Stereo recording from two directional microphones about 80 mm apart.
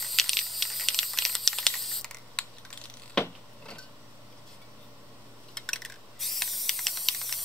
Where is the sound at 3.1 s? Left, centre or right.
Centre.